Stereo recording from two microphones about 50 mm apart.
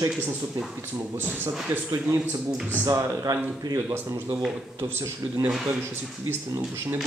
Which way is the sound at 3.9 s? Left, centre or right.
Right.